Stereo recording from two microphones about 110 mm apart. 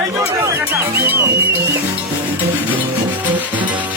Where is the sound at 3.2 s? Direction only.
15° right (ahead or behind).